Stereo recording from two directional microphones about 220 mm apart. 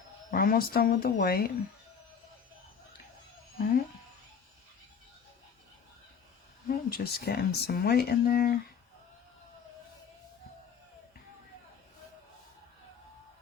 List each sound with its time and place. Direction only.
0.3 s speech: 45° left (ahead or behind)
6.7 s speech: 45° left (ahead or behind)